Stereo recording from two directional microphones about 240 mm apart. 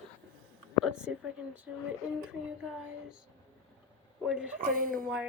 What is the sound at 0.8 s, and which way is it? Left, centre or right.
Speech, centre.